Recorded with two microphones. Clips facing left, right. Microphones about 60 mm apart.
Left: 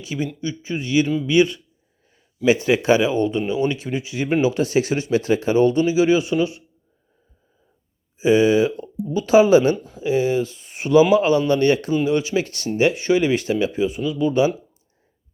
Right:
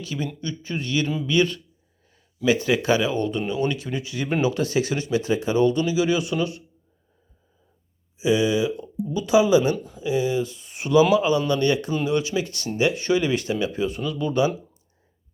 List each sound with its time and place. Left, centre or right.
0.0 s a man's voice: centre
2.1 s a sound: left
2.6 s speech: left
4.5 s speech: left
8.2 s speech: left
9.7 s speech: left